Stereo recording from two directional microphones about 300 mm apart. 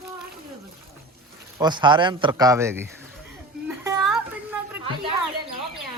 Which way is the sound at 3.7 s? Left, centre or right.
Centre.